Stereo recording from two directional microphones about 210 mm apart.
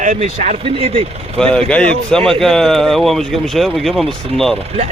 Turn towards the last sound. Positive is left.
turn(degrees=0)  # may be behind; listen again after turning